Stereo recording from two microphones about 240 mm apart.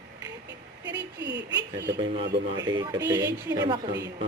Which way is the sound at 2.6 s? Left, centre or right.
Centre.